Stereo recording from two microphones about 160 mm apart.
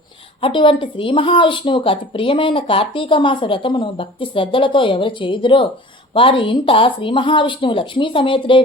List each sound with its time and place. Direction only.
0.4 s speech: 30° left (ahead or behind)